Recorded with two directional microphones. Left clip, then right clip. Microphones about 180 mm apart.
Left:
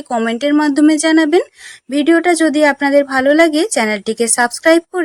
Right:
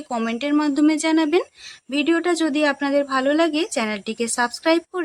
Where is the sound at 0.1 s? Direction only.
25° left (ahead or behind).